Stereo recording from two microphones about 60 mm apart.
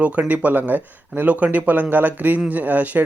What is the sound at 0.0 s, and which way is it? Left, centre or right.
Speech, right.